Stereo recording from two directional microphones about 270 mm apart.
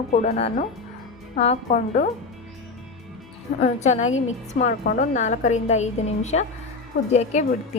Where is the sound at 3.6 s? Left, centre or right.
Left.